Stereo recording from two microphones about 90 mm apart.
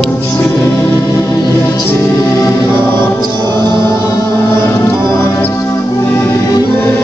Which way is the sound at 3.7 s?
35° left (ahead or behind).